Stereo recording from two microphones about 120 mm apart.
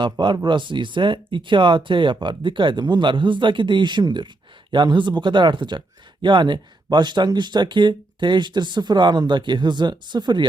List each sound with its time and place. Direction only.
0.0 s speech: 40° right (ahead or behind)